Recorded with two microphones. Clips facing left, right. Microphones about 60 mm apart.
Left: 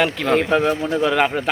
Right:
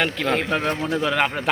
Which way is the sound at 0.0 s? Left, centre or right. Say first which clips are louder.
Left 4 dB; centre.